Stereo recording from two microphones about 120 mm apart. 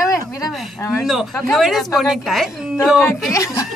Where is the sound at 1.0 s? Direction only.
Centre (ahead or behind).